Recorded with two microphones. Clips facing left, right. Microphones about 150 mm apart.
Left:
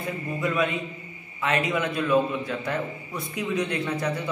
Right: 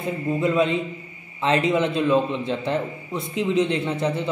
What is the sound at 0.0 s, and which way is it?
A woman's voice, 25° right (ahead or behind).